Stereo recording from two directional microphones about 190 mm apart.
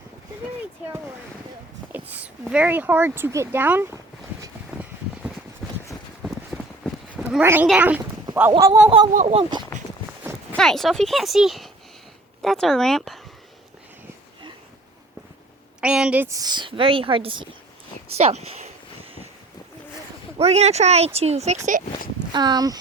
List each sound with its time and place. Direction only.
1.9 s a sound: 10° right (ahead or behind)
2.4 s speech: 5° right (ahead or behind)
5.6 s a sound: centre (ahead or behind)
6.2 s clip-clop: 5° right (ahead or behind)
8.5 s a woman's voice: 20° right (ahead or behind)
10.5 s speech: centre (ahead or behind)
15.8 s a woman's voice: 5° right (ahead or behind); by 18.7 s 35° right (ahead or behind)
20.4 s speech: 35° right (ahead or behind)
22.3 s a woman's voice: 20° right (ahead or behind)